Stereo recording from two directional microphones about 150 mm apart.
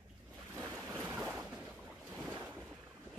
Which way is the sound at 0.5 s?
10° right (ahead or behind).